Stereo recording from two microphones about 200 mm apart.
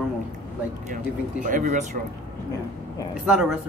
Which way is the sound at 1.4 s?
40° right (ahead or behind).